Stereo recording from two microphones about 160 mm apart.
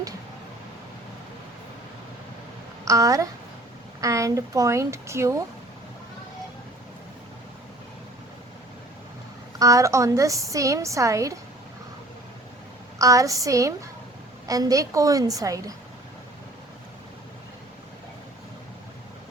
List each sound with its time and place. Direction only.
2.8 s a woman's voice: 20° right (ahead or behind)
9.6 s a woman's voice: 20° right (ahead or behind)
13.0 s a woman's voice: 20° right (ahead or behind)